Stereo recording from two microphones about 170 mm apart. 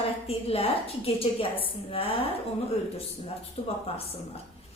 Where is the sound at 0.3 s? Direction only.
35° left (ahead or behind).